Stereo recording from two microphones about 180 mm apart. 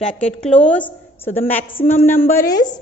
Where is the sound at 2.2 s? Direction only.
15° left (ahead or behind).